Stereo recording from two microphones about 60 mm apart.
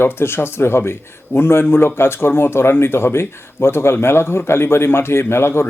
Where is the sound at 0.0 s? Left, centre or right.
Left.